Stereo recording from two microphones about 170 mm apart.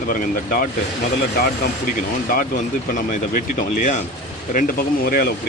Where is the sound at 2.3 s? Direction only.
50° left (ahead or behind).